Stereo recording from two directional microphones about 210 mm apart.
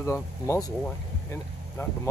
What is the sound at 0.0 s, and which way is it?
A man's voice, 15° left (ahead or behind).